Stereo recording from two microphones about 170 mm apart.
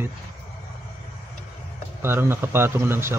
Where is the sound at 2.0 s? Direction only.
15° right (ahead or behind).